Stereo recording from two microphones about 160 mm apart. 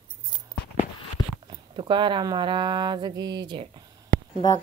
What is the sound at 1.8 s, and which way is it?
Speech, 30° right (ahead or behind).